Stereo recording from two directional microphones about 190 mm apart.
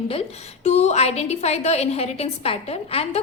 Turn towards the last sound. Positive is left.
turn(degrees=30)  # may be behind; listen again after turning